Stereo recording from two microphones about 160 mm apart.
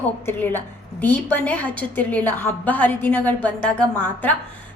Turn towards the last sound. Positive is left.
turn(degrees=5)  # may be behind; listen again after turning